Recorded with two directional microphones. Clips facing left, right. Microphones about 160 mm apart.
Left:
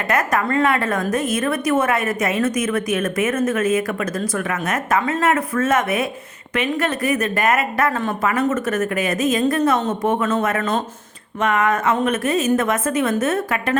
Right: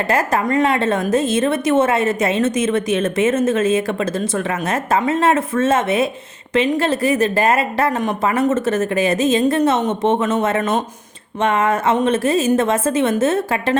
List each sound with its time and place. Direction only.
0.1 s a woman's voice: 30° right (ahead or behind)
11.3 s a woman's voice: 30° right (ahead or behind)